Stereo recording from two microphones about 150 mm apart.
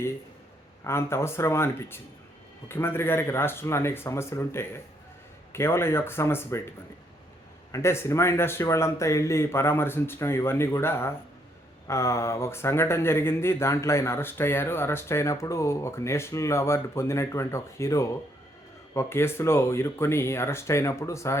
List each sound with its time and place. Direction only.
0.9 s speech: 15° left (ahead or behind)
7.7 s speech: 20° left (ahead or behind)